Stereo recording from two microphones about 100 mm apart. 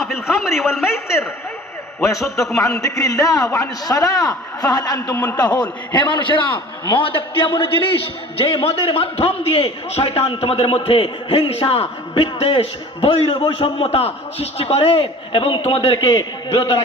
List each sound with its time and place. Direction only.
0.0 s chuckle: 5° right (ahead or behind)
0.9 s a man's voice: 25° left (ahead or behind)
5.1 s a man's voice: 15° left (ahead or behind)
5.4 s a man's voice: 45° left (ahead or behind); by 10.0 s 85° left
10.1 s a man's voice: 75° left (ahead or behind)
15.0 s a man's voice: 55° left (ahead or behind)
16.0 s a man's voice: 40° left (ahead or behind)